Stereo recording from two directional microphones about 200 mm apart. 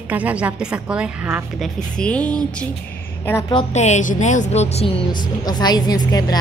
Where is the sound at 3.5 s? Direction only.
35° left (ahead or behind).